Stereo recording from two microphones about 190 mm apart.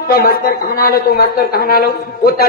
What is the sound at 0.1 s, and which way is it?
A woman's voice, 50° left (ahead or behind).